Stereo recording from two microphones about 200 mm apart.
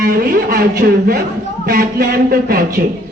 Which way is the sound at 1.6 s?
45° right (ahead or behind).